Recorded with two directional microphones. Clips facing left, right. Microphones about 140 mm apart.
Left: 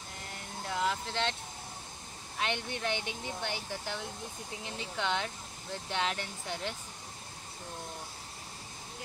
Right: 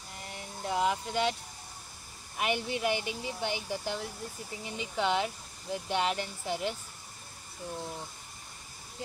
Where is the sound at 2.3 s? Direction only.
10° right (ahead or behind).